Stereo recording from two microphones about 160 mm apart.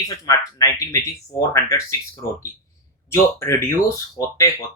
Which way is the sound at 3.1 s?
15° left (ahead or behind).